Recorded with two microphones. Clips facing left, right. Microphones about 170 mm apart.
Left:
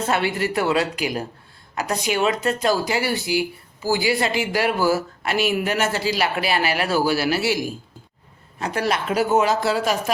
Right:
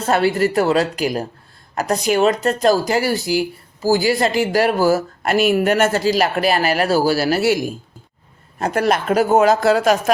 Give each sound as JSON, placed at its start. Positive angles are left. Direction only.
{"t": 0.0, "sound": "speech", "side_deg": -40}